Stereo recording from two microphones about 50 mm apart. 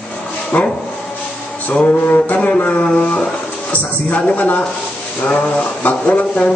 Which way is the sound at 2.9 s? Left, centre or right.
Left.